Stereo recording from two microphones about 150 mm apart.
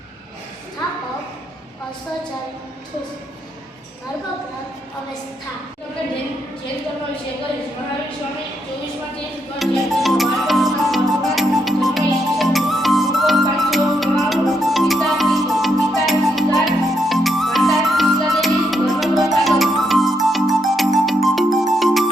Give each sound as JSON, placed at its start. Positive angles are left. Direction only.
{"t": 9.6, "sound": "music", "side_deg": 0}